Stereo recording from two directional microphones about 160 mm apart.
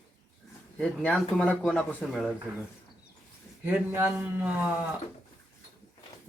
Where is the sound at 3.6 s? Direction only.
15° right (ahead or behind).